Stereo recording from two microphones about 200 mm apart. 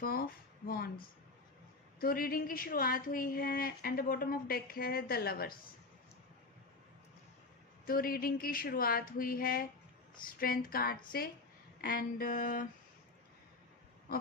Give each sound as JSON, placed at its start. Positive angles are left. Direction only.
{"t": 0.0, "sound": "speech", "side_deg": 45}
{"t": 2.0, "sound": "speech", "side_deg": 50}
{"t": 7.9, "sound": "speech", "side_deg": 45}